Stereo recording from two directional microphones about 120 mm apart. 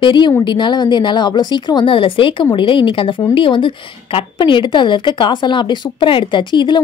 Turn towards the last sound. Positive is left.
turn(degrees=40)  # may be behind; listen again after turning